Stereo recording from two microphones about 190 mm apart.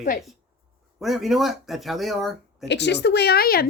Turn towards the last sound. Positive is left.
turn(degrees=55)  # may be behind; listen again after turning